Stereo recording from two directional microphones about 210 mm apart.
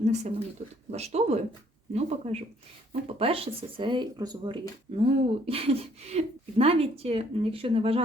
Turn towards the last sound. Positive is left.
turn(degrees=-25)  # may be behind; listen again after turning